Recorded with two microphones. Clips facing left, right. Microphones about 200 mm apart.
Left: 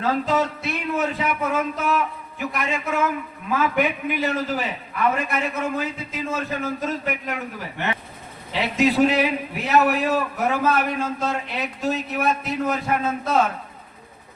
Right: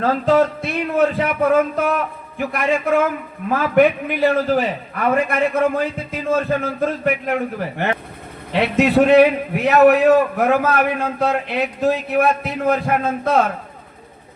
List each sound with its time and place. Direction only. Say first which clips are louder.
0.0 s a man's voice: right 6 dB; 55° right (ahead or behind)